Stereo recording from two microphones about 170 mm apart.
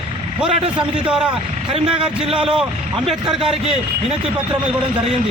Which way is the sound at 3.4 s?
35° right (ahead or behind).